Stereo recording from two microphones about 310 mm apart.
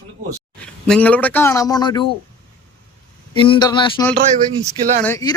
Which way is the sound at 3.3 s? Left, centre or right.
Centre.